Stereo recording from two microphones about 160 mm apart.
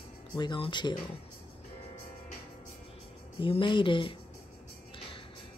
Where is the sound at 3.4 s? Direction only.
30° left (ahead or behind).